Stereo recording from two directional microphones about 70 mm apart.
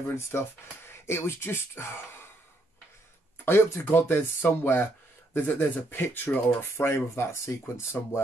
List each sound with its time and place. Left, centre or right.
0.1 s speech: left
3.4 s speech: left
8.0 s speech: left